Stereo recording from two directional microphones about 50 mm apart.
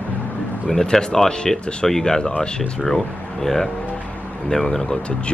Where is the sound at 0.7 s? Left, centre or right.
Centre.